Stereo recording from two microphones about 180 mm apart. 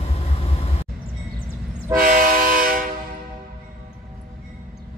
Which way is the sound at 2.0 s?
50° right (ahead or behind).